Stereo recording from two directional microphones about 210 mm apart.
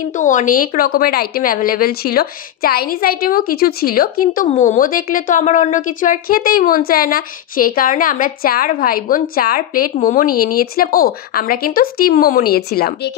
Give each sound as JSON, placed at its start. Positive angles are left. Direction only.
{"t": 0.2, "sound": "speech", "side_deg": 35}